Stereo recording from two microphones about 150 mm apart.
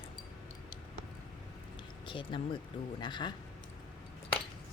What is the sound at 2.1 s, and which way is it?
Speech, 35° left (ahead or behind).